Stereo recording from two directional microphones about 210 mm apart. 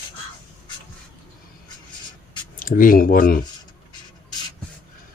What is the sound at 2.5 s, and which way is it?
Speech, 40° left (ahead or behind).